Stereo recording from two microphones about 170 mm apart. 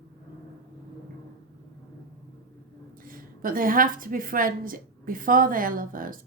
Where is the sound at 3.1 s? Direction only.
55° right (ahead or behind).